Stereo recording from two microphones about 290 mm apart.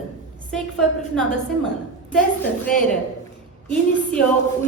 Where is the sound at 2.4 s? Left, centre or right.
Left.